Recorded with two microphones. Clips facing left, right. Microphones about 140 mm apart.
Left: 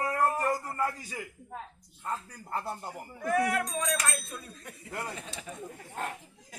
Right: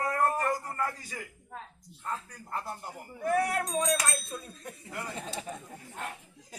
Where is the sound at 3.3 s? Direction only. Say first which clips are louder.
Even; 35° right (ahead or behind).